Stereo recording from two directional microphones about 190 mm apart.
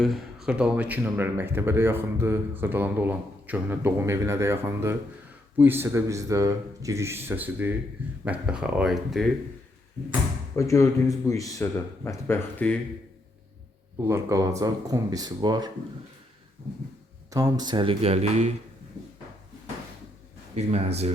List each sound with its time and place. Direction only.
0.0 s a man's voice: centre (ahead or behind)
10.5 s speech: 15° left (ahead or behind)
14.0 s speech: 15° right (ahead or behind)
17.3 s speech: 20° right (ahead or behind); by 18.5 s 35° right (ahead or behind)
20.6 s speech: 35° right (ahead or behind)